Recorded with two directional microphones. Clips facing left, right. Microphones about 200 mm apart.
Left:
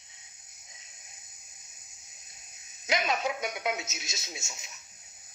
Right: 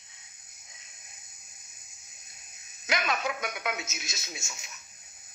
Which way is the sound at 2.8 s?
25° left (ahead or behind).